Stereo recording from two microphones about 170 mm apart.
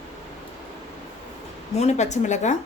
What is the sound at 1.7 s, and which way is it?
Speech, 40° left (ahead or behind).